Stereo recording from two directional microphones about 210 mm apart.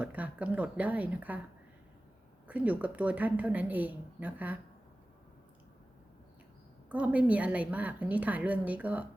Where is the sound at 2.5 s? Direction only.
5° right (ahead or behind).